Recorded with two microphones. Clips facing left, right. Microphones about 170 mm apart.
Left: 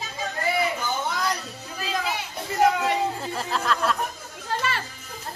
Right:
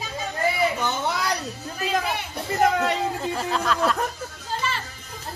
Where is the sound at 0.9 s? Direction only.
75° right (ahead or behind).